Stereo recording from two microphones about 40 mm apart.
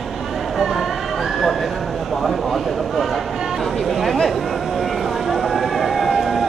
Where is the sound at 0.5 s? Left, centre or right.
Centre.